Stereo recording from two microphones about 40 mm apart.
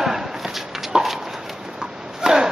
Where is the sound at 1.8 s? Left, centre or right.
Centre.